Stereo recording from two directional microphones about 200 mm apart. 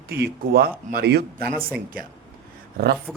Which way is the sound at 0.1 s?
50° right (ahead or behind).